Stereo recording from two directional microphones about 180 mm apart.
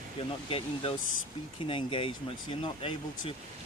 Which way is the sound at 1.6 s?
30° left (ahead or behind).